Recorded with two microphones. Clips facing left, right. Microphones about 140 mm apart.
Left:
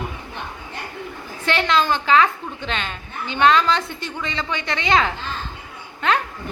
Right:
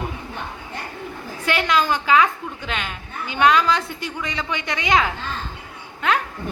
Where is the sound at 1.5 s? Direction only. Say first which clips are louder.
Left 1 dB; 10° right (ahead or behind).